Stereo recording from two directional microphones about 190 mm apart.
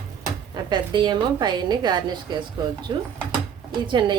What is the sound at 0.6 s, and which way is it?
A woman's voice, 25° right (ahead or behind).